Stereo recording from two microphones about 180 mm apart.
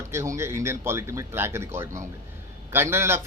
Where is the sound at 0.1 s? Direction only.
15° right (ahead or behind).